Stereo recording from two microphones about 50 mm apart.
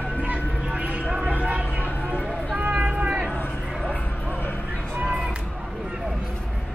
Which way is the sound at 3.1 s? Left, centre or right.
Centre.